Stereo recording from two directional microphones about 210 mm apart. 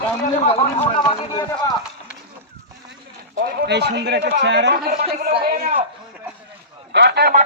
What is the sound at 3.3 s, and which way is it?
Speech, 50° right (ahead or behind).